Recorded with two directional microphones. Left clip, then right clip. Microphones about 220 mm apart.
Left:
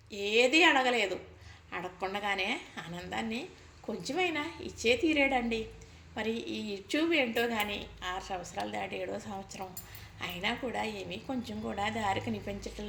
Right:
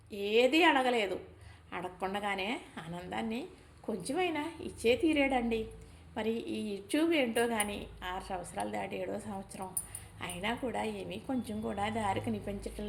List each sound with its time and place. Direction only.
0.1 s a woman's voice: 10° right (ahead or behind)